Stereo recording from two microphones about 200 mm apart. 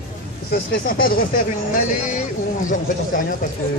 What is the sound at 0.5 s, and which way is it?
Speech, 50° left (ahead or behind).